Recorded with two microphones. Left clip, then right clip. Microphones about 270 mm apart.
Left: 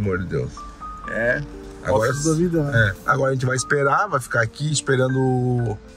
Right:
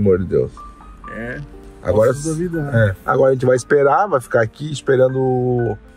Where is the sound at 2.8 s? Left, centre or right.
Centre.